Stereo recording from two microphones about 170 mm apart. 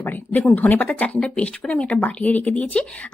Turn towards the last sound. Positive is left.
turn(degrees=5)  # may be behind; listen again after turning